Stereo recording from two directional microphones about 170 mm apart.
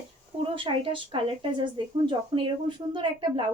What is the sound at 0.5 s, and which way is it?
A woman's voice, 30° right (ahead or behind).